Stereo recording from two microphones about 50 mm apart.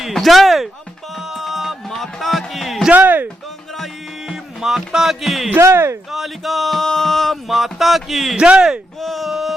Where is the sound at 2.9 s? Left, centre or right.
Right.